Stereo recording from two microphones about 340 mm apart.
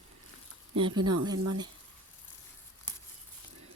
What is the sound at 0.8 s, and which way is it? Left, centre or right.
Speech, centre.